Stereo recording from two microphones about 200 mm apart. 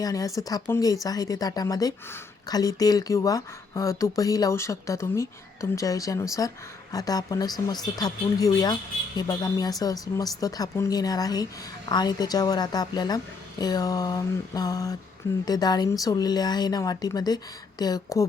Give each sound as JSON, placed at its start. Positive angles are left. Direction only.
{"t": 0.0, "sound": "speech", "side_deg": 15}